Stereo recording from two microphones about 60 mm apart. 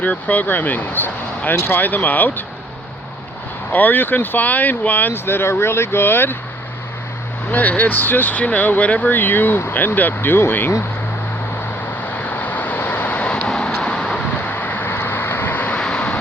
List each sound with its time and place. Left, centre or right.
0.0 s speech: left
3.7 s speech: left
7.5 s speech: left
12.1 s vehicle: left; by 14.2 s centre
14.3 s vehicle: left
15.8 s vehicle: centre